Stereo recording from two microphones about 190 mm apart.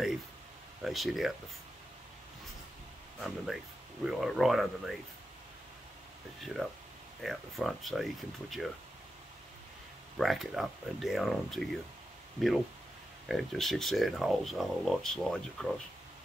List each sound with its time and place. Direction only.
0.8 s speech: centre (ahead or behind)
3.2 s speech: 5° right (ahead or behind)
6.4 s speech: centre (ahead or behind)
10.1 s speech: centre (ahead or behind)